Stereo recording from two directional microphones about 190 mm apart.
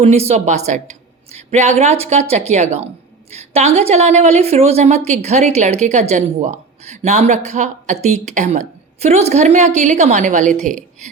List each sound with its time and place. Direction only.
0.0 s a woman's voice: 35° right (ahead or behind)